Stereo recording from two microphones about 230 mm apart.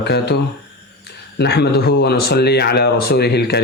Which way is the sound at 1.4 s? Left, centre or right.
Left.